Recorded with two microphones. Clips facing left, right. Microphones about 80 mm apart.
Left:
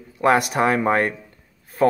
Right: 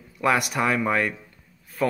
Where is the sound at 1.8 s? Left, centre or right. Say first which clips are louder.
Left 7 dB; left.